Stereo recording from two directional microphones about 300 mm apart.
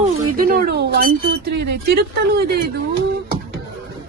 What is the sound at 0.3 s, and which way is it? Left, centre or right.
Speech, right.